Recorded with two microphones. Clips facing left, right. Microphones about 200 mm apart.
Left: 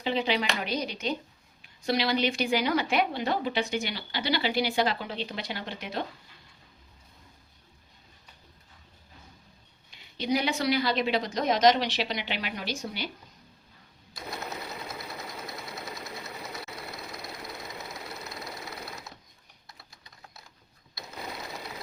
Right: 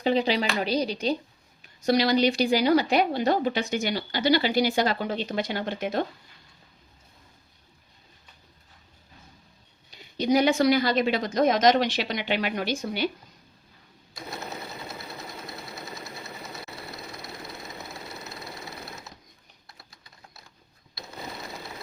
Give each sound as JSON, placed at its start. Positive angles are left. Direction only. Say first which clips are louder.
{"t": 0.0, "sound": "a woman's voice", "louder": "right 4 dB", "side_deg": -40}
{"t": 9.9, "sound": "a woman's voice", "louder": "right 6 dB", "side_deg": -45}